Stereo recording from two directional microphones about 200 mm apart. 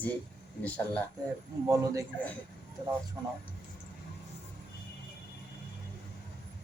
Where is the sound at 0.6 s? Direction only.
10° left (ahead or behind).